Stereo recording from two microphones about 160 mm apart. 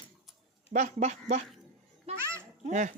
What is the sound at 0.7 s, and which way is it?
Speech, 50° right (ahead or behind).